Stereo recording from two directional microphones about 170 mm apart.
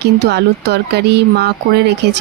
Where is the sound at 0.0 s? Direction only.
80° right.